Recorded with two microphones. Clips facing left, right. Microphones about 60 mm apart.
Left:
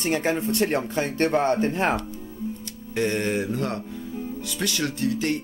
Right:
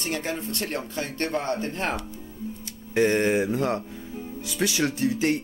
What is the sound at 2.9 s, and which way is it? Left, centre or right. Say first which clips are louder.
Speech: right 3 dB; centre.